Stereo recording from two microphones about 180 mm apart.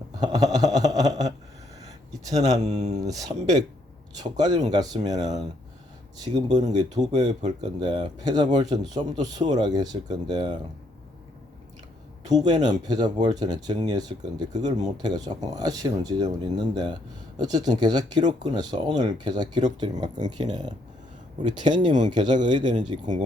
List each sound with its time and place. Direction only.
0.2 s a sound: 20° right (ahead or behind)
2.5 s speech: 40° right (ahead or behind)
3.0 s speech: 20° right (ahead or behind)
6.7 s speech: 20° right (ahead or behind)
12.3 s speech: 20° right (ahead or behind)